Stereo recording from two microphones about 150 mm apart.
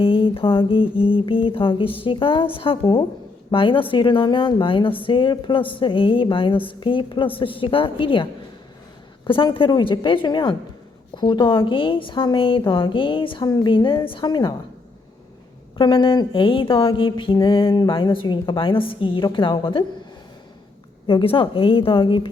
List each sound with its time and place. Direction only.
0.0 s speech: 35° left (ahead or behind)
15.8 s speech: 35° left (ahead or behind)
21.1 s speech: 35° left (ahead or behind)